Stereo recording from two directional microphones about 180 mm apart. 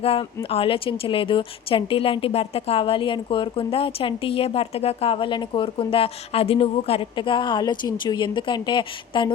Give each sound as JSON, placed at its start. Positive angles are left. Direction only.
{"t": 0.0, "sound": "a woman's voice", "side_deg": 30}